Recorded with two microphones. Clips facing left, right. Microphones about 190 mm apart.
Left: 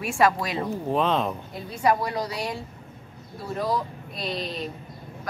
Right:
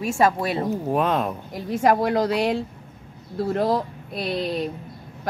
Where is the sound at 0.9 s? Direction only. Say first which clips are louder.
Even; 10° right (ahead or behind).